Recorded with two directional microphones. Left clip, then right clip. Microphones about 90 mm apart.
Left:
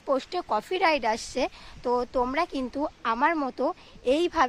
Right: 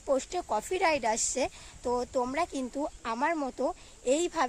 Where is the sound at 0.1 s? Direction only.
45° right (ahead or behind).